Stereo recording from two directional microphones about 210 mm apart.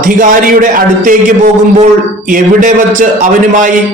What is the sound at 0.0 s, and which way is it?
A man's voice, 40° right (ahead or behind).